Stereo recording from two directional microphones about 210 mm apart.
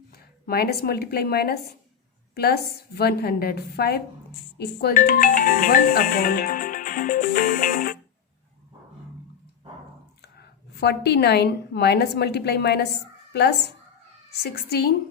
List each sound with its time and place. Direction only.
0.1 s a woman's voice: 45° left (ahead or behind)
10.2 s a woman's voice: 50° left (ahead or behind)
14.4 s a woman's voice: 50° left (ahead or behind)